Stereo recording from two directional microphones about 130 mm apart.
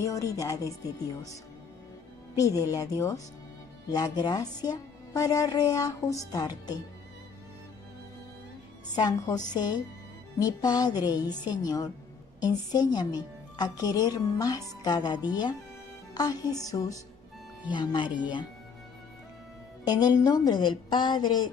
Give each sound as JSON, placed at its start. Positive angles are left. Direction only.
{"t": 0.0, "sound": "a woman's voice", "side_deg": 25}
{"t": 8.9, "sound": "a woman's voice", "side_deg": 30}
{"t": 19.8, "sound": "a woman's voice", "side_deg": 30}